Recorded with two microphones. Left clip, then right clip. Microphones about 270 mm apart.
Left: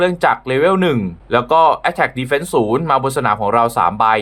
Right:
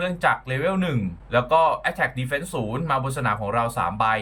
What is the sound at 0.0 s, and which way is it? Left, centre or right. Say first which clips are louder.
Speech: left 8 dB; centre.